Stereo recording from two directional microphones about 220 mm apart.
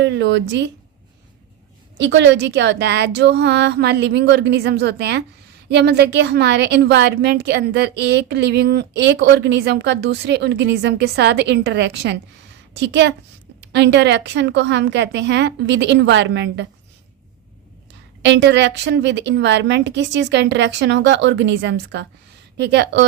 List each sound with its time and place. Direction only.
0.0 s a woman's voice: 55° right (ahead or behind)
2.0 s a woman's voice: 50° right (ahead or behind)
18.2 s a woman's voice: 50° right (ahead or behind)